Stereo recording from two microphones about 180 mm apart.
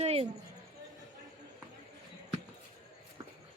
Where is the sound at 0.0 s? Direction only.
35° right (ahead or behind).